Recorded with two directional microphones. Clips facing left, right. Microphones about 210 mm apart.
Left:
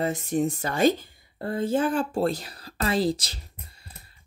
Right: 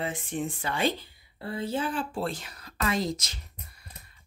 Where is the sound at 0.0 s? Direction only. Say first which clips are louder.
Left 7 dB; 40° left (ahead or behind).